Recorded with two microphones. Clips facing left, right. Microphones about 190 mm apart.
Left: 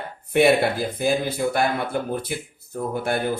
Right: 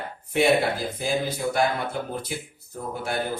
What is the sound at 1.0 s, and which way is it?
A man's voice, 55° left (ahead or behind).